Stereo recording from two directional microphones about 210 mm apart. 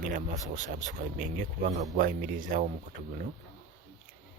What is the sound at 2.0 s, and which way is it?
Speech, 40° right (ahead or behind).